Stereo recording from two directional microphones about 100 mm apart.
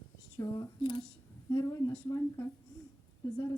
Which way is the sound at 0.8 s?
55° left (ahead or behind).